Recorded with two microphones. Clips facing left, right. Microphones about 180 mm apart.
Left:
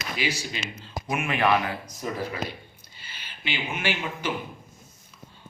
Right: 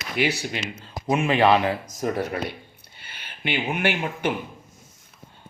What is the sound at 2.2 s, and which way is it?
Speech, 65° right (ahead or behind).